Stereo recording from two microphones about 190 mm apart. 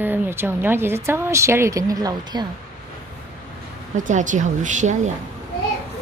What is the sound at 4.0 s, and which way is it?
A woman's voice, 40° right (ahead or behind).